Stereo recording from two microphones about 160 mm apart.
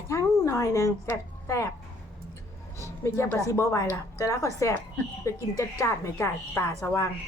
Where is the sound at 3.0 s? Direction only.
15° left (ahead or behind).